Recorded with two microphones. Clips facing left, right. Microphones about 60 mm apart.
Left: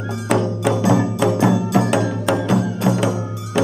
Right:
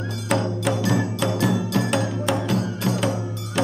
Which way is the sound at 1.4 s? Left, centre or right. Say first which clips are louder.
Left 4 dB; left.